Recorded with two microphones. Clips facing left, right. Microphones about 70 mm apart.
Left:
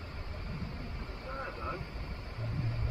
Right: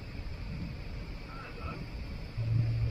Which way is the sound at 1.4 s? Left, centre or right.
Left.